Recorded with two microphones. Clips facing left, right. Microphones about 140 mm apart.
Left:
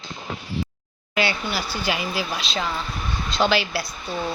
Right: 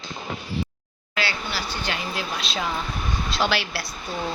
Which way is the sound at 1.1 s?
20° left (ahead or behind).